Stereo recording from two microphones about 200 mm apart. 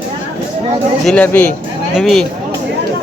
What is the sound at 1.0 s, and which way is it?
A man's voice, 5° left (ahead or behind).